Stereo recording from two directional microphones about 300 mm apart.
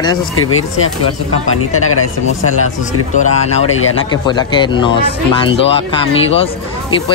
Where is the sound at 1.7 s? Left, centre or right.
Left.